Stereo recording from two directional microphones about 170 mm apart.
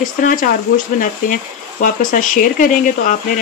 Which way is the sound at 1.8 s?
50° left (ahead or behind).